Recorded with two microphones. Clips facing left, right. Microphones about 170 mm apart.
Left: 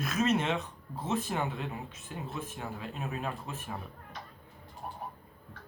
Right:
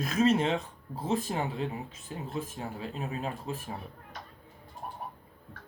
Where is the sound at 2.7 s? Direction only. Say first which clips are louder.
Right 2 dB; 30° right (ahead or behind).